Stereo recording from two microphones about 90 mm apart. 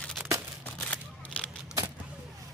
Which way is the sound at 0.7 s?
15° left (ahead or behind).